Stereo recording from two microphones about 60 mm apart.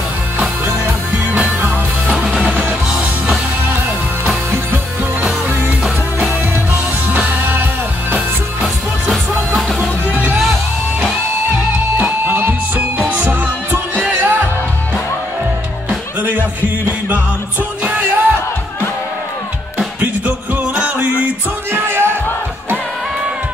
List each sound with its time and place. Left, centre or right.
2.0 s music: centre
5.5 s music: right
7.1 s music: right
9.8 s music: right
12.0 s music: right
16.2 s music: right
20.0 s music: right
21.7 s a sound: right